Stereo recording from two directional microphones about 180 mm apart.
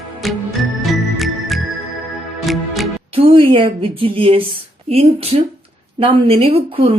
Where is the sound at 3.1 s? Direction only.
30° right (ahead or behind).